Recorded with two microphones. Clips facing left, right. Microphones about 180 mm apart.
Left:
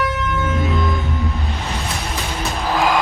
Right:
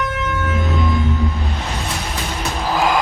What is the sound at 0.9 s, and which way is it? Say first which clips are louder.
Music: right 3 dB; centre (ahead or behind).